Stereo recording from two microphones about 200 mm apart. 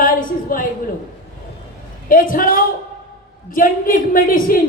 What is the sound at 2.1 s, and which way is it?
Speech, 45° left (ahead or behind).